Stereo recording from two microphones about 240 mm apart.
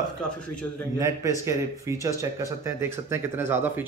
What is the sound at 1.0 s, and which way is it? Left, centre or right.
A man's voice, centre.